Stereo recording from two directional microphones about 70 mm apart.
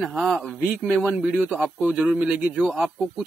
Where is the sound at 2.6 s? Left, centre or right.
Centre.